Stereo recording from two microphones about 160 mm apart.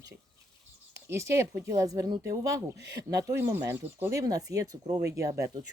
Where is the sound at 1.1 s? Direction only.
20° right (ahead or behind).